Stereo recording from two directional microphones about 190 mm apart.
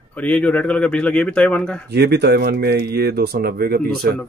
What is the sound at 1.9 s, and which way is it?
Speech, 60° right (ahead or behind).